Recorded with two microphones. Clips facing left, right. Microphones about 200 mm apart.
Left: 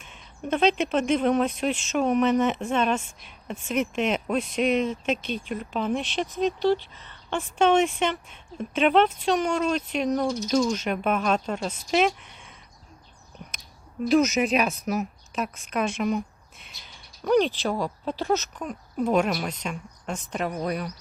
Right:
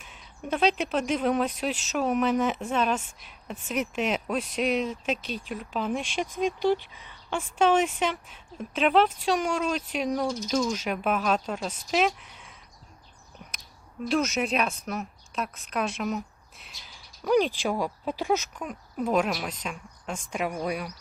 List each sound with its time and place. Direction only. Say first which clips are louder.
0.0 s speech: left 3 dB; 5° right (ahead or behind)
6.4 s speech: left 2 dB; 15° right (ahead or behind)
14.1 s speech: left 5 dB; centre (ahead or behind)